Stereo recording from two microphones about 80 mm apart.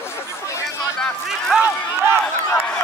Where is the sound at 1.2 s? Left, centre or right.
Centre.